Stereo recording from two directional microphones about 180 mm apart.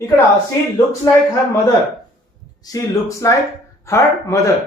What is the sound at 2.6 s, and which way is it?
Speech, 15° left (ahead or behind).